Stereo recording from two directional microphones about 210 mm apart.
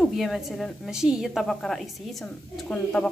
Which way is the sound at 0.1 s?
Centre (ahead or behind).